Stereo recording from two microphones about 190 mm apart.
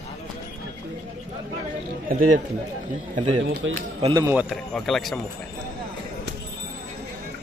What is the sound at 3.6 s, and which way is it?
Speech, 80° right.